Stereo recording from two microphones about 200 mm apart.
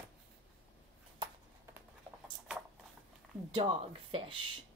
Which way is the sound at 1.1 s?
20° right (ahead or behind).